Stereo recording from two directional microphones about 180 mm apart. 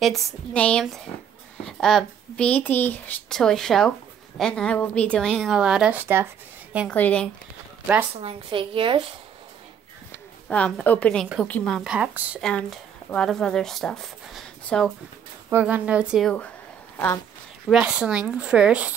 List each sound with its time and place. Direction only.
0.0 s speech: 5° left (ahead or behind)
6.9 s a woman's voice: 10° left (ahead or behind)
8.1 s a woman's voice: 35° right (ahead or behind)
10.5 s a woman's voice: 5° left (ahead or behind)
12.4 s speech: 5° left (ahead or behind)
15.5 s speech: 10° right (ahead or behind)
17.6 s speech: 5° right (ahead or behind)